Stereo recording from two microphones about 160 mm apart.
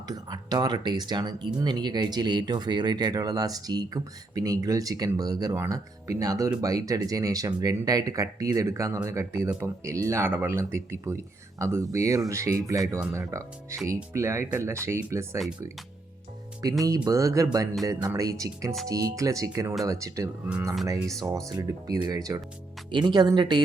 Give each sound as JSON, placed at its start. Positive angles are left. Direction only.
{"t": 0.1, "sound": "speech", "side_deg": -25}
{"t": 16.8, "sound": "speech", "side_deg": -20}